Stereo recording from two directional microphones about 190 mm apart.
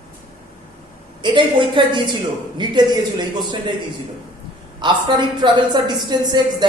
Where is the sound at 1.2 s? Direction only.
25° right (ahead or behind).